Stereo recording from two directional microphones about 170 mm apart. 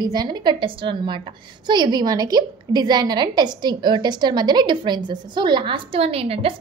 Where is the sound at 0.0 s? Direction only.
25° right (ahead or behind).